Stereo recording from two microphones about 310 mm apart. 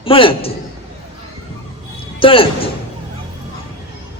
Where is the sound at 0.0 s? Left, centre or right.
Centre.